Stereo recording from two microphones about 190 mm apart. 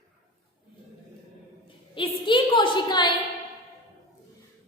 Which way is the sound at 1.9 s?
25° left (ahead or behind).